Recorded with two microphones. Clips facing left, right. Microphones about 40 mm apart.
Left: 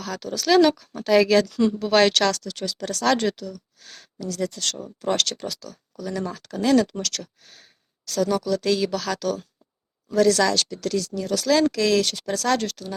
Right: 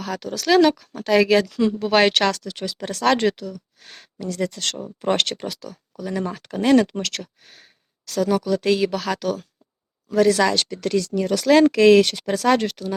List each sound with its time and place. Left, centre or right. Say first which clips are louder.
0.0 s speech: right 2 dB; centre; by 7.3 s right
7.4 s speech: right 2 dB; centre
10.7 s speech: right 4 dB; right